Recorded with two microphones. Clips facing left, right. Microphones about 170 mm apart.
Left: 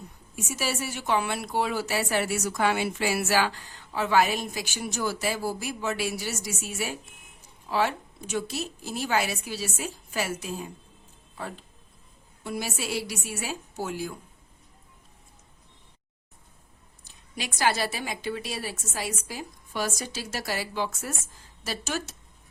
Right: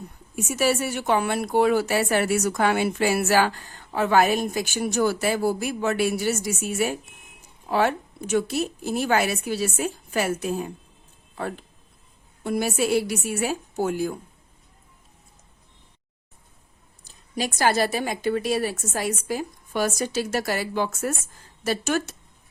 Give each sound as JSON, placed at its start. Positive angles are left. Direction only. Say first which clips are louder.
{"t": 0.3, "sound": "a woman's voice", "louder": "right 8 dB", "side_deg": -55}
{"t": 17.0, "sound": "a woman's voice", "louder": "right 9 dB", "side_deg": -45}